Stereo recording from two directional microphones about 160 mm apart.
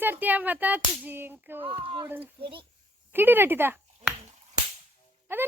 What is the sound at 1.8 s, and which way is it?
Speech, 35° right (ahead or behind).